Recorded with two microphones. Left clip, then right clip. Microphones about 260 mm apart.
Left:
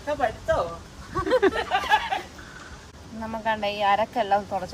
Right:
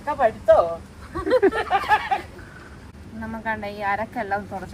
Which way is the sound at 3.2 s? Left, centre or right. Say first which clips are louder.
Left 2 dB; left.